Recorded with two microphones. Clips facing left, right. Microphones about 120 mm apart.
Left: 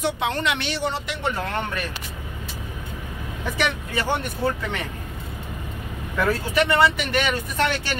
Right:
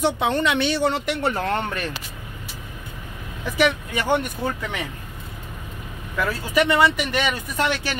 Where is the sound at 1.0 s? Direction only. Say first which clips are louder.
Right 4 dB; 40° right (ahead or behind).